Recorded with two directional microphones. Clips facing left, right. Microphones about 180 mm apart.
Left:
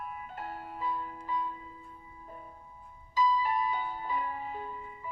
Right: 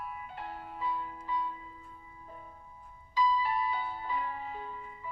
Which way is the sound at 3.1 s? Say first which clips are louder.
Left 1 dB; 45° left (ahead or behind).